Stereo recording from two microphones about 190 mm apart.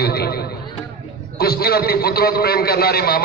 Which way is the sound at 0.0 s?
55° left (ahead or behind).